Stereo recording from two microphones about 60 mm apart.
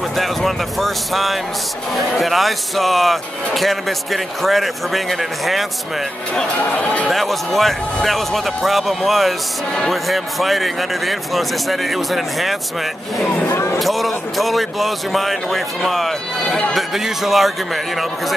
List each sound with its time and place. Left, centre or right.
0.1 s speech: centre
6.6 s speech: left
7.1 s speech: centre
13.7 s speech: centre
16.7 s speech: centre